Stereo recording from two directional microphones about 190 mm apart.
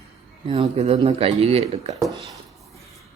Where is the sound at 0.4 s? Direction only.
30° right (ahead or behind).